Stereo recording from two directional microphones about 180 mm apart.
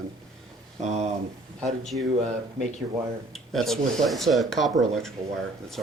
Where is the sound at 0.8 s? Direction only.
40° right (ahead or behind).